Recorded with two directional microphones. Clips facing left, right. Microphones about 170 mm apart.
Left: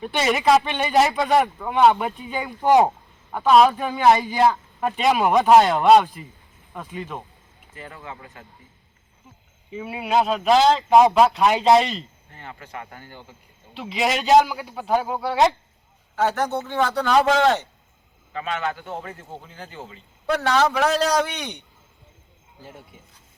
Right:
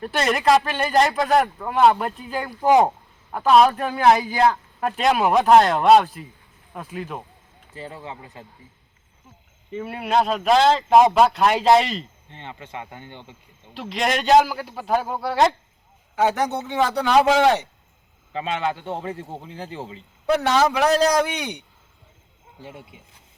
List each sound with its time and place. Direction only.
0.0 s speech: centre (ahead or behind)
7.8 s a man's voice: 30° right (ahead or behind)
9.6 s speech: centre (ahead or behind)
12.3 s a man's voice: 20° right (ahead or behind)
13.7 s speech: centre (ahead or behind)
16.1 s a man's voice: 15° right (ahead or behind)
18.3 s a man's voice: 25° right (ahead or behind)
20.2 s a man's voice: 20° right (ahead or behind)
20.6 s a man's voice: 5° right (ahead or behind)